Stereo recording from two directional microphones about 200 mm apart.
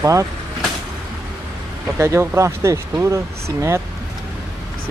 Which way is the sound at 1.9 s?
15° right (ahead or behind).